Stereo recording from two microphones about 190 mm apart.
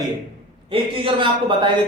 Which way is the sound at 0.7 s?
25° right (ahead or behind).